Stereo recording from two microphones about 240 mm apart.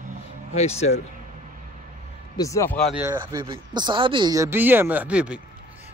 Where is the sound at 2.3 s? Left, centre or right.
Centre.